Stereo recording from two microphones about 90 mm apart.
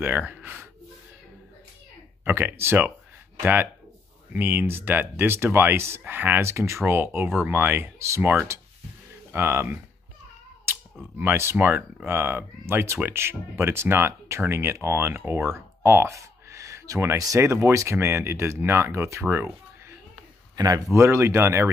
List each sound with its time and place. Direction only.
0.0 s speech: 20° right (ahead or behind)
2.2 s speech: 20° right (ahead or behind)
4.3 s speech: 20° right (ahead or behind)
11.1 s speech: 25° right (ahead or behind)
19.3 s a sound: 25° right (ahead or behind)
20.5 s speech: 40° right (ahead or behind)